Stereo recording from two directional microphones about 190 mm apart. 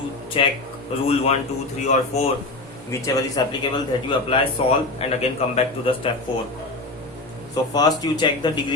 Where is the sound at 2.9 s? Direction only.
20° left (ahead or behind).